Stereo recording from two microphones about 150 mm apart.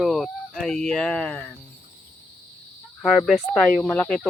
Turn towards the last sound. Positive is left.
turn(degrees=5)  # may be behind; listen again after turning